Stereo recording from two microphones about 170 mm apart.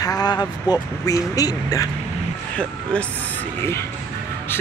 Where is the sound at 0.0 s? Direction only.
25° left (ahead or behind).